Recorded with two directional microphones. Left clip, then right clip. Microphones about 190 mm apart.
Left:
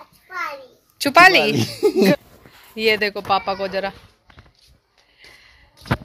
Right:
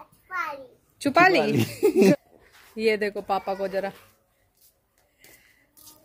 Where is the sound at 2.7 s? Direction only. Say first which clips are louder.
Left 5 dB; 5° right (ahead or behind).